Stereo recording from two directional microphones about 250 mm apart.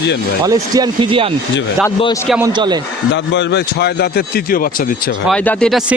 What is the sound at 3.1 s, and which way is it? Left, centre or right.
Speech, left.